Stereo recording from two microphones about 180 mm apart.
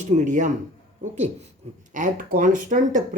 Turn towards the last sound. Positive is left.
turn(degrees=-45)  # may be behind; listen again after turning